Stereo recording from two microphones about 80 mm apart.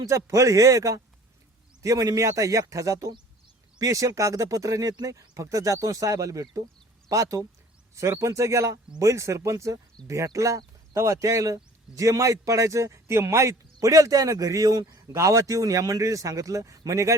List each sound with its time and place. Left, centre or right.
0.0 s speech: right